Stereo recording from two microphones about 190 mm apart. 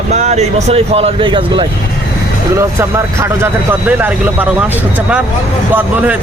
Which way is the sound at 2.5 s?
15° right (ahead or behind).